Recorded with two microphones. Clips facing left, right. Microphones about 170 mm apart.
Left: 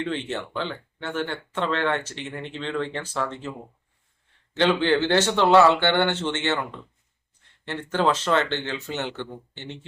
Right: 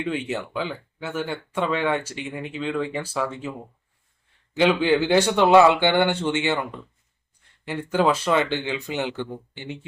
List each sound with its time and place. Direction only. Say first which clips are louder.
0.0 s speech: right 1 dB; 10° right (ahead or behind)
4.5 s speech: right 2 dB; 10° right (ahead or behind)